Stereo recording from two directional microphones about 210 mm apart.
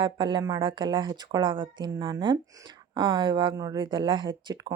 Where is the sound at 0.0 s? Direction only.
25° right (ahead or behind).